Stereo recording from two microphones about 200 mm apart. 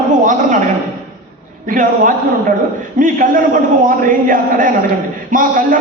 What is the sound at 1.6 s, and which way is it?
Speech, 40° right (ahead or behind).